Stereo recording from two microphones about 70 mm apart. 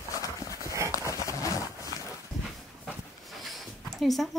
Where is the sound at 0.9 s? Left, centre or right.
Left.